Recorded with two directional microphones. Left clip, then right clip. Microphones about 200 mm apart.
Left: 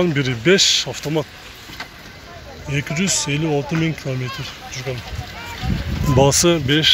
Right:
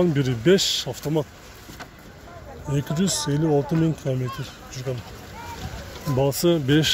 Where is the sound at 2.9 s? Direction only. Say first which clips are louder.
Left 5 dB; 30° right (ahead or behind).